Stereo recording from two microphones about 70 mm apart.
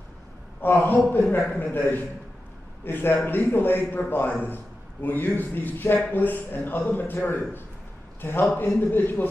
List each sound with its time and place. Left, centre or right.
0.6 s a man's voice: left